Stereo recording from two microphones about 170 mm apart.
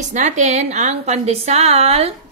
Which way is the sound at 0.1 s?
45° right (ahead or behind).